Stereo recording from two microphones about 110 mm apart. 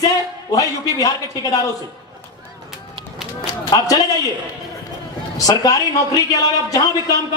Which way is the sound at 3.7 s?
35° left (ahead or behind).